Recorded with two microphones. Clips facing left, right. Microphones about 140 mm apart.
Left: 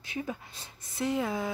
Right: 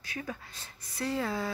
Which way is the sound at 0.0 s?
20° left (ahead or behind).